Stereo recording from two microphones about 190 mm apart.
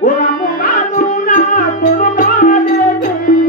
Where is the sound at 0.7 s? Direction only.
45° left (ahead or behind).